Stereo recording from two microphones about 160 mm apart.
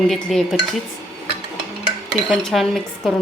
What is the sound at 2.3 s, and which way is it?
Speech, centre (ahead or behind).